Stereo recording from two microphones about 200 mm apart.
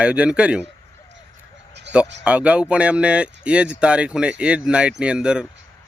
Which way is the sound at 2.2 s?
5° right (ahead or behind).